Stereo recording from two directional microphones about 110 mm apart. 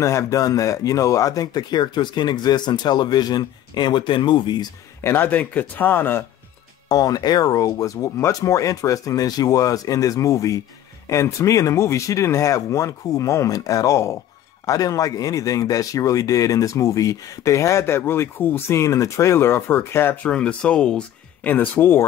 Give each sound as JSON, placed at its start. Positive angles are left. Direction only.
{"t": 0.0, "sound": "speech", "side_deg": 25}
{"t": 5.0, "sound": "speech", "side_deg": 20}
{"t": 6.9, "sound": "speech", "side_deg": 35}
{"t": 20.2, "sound": "speech", "side_deg": 10}